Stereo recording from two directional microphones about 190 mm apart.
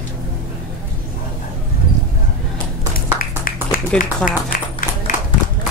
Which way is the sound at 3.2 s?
50° left (ahead or behind).